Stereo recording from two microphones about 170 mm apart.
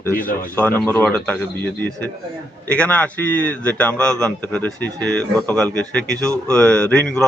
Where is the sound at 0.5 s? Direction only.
10° left (ahead or behind).